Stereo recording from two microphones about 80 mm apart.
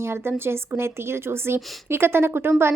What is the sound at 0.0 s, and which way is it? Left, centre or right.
Speech, right.